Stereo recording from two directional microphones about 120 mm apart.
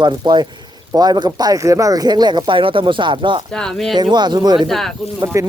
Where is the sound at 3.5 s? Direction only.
5° left (ahead or behind).